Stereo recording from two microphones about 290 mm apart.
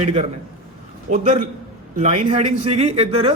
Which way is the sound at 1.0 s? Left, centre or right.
Right.